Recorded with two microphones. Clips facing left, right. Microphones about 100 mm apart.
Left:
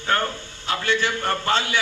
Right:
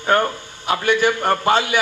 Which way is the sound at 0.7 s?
15° right (ahead or behind).